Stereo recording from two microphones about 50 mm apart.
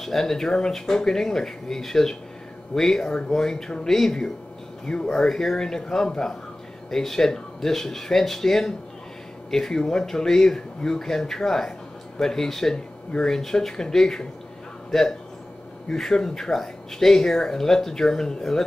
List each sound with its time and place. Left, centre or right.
0.0 s speech: centre
12.7 s speech: centre